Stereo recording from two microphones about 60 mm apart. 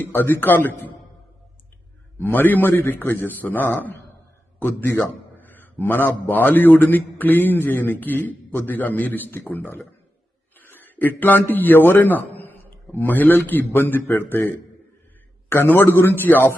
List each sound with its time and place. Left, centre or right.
0.0 s a man's voice: left
2.1 s a man's voice: left